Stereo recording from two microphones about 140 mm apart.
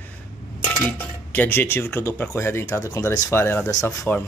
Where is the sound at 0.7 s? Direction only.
15° left (ahead or behind).